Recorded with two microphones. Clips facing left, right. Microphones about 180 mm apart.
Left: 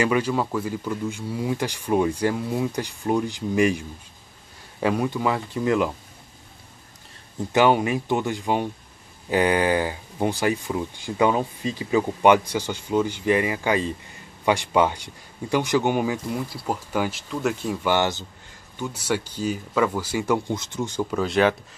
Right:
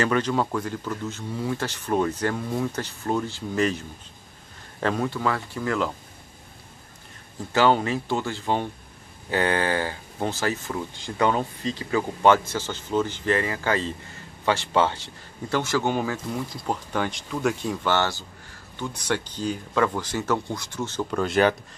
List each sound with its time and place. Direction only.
0.0 s speech: 10° left (ahead or behind)
7.5 s speech: 15° left (ahead or behind)
17.8 s speech: 15° left (ahead or behind); by 21.5 s centre (ahead or behind)